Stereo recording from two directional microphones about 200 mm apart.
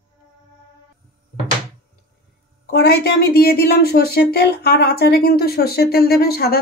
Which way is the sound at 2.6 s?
55° left (ahead or behind).